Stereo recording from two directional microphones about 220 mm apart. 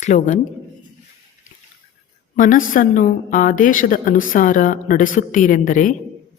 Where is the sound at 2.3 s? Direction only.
35° left (ahead or behind).